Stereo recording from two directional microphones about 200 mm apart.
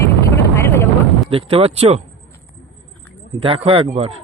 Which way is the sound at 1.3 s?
30° right (ahead or behind).